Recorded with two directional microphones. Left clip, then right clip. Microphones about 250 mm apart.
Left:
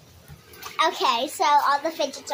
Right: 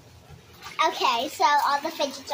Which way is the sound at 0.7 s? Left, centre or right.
Centre.